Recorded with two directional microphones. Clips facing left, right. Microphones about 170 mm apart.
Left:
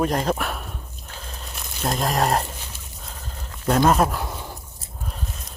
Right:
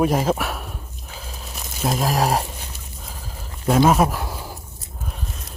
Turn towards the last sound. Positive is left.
turn(degrees=-5)  # may be behind; listen again after turning